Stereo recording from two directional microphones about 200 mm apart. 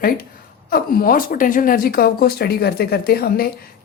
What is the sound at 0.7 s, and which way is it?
A woman's voice, 45° left (ahead or behind).